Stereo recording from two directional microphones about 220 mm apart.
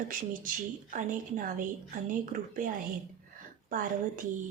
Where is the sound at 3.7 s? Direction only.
40° right (ahead or behind).